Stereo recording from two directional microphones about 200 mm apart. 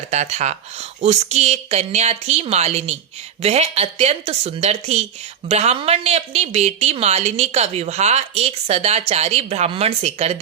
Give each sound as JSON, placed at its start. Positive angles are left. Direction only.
{"t": 0.1, "sound": "a woman's voice", "side_deg": -35}